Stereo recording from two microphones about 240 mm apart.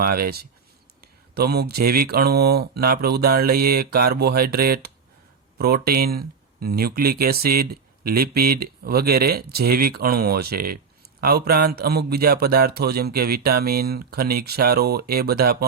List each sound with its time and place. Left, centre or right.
0.0 s speech: right